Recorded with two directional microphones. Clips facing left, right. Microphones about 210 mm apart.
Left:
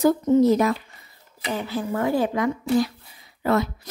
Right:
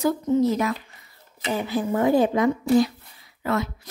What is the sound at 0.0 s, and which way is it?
Speech, 40° left (ahead or behind).